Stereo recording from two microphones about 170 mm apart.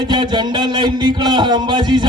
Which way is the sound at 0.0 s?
25° right (ahead or behind).